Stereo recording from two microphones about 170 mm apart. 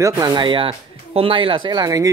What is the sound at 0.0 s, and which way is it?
Speech, 20° right (ahead or behind).